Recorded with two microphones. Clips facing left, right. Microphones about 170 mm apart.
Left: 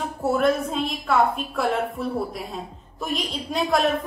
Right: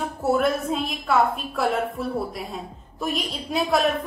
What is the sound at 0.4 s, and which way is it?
A woman's voice, centre (ahead or behind).